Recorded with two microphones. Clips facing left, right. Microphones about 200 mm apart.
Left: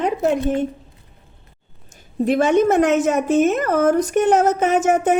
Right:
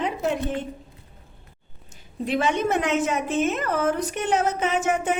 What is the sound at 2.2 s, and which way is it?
A woman's voice, 45° left (ahead or behind).